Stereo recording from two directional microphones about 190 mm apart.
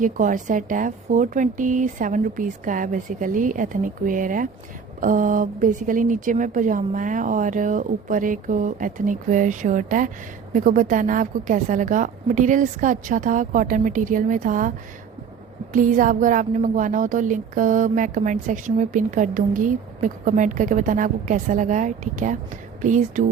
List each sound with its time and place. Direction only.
0.0 s a woman's voice: 45° right (ahead or behind)
15.7 s a woman's voice: 45° right (ahead or behind)